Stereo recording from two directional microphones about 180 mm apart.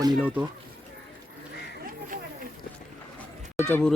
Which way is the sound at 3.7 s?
5° left (ahead or behind).